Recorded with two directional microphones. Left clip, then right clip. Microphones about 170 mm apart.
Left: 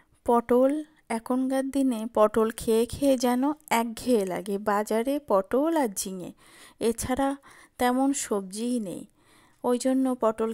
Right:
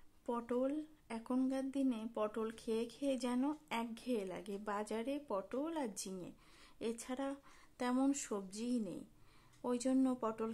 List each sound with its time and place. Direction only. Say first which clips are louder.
0.3 s a woman's voice: left 17 dB; 45° left (ahead or behind)